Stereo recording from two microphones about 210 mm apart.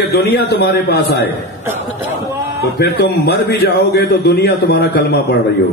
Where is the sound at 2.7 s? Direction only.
50° left (ahead or behind).